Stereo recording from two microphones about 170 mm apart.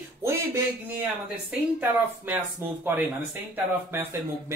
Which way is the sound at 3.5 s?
15° right (ahead or behind).